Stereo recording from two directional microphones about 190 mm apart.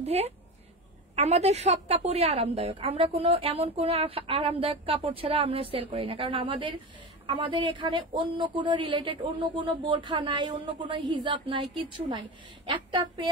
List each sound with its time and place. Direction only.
0.0 s a woman's voice: 35° right (ahead or behind)